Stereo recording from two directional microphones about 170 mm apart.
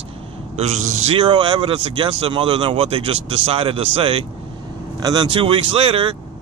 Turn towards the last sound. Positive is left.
turn(degrees=-30)  # may be behind; listen again after turning